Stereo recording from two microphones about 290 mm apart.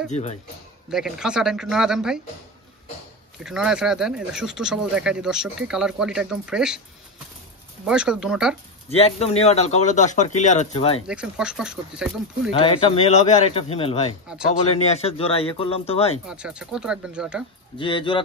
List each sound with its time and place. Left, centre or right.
0.1 s a man's voice: left
0.8 s speech: centre
3.4 s speech: centre
7.8 s speech: centre
8.9 s a man's voice: left
11.1 s speech: centre
12.5 s a man's voice: centre
16.3 s speech: centre
17.7 s speech: centre